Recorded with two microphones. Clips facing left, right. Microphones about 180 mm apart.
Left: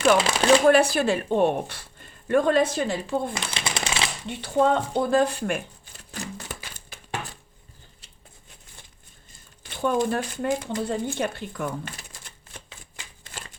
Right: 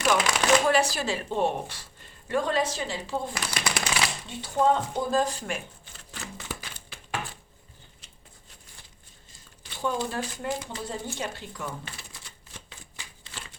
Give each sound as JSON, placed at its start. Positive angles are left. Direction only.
{"t": 0.0, "sound": "speech", "side_deg": 30}
{"t": 0.7, "sound": "speech", "side_deg": 55}
{"t": 3.3, "sound": "speech", "side_deg": 25}
{"t": 4.3, "sound": "speech", "side_deg": 65}
{"t": 9.6, "sound": "speech", "side_deg": 55}